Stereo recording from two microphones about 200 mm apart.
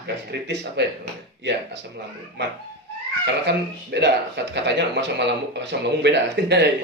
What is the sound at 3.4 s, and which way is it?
Speech, 60° right (ahead or behind).